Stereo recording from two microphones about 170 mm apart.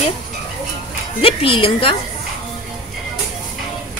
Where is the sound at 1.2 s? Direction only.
35° left (ahead or behind).